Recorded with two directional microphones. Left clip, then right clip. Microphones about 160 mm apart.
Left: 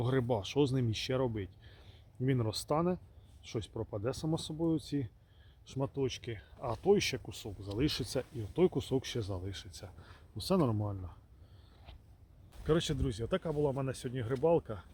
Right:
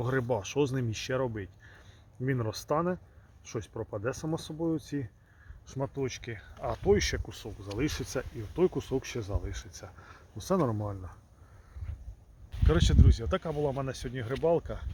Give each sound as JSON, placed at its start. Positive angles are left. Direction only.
{"t": 0.0, "sound": "speech", "side_deg": 10}
{"t": 2.5, "sound": "speech", "side_deg": 10}
{"t": 12.6, "sound": "speech", "side_deg": 0}